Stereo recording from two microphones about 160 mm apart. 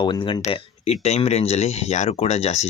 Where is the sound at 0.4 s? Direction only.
40° left (ahead or behind).